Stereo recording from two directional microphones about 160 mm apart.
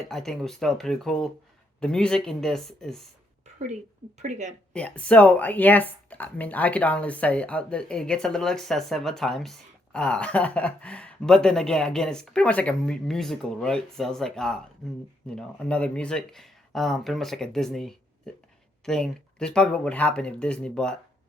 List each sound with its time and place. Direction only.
0.1 s speech: 5° left (ahead or behind)
4.2 s speech: 45° right (ahead or behind)
4.7 s speech: 5° left (ahead or behind)